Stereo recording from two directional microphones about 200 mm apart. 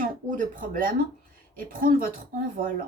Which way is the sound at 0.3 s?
45° right (ahead or behind).